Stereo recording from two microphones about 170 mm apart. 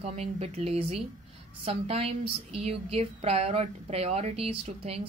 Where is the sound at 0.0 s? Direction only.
40° right (ahead or behind).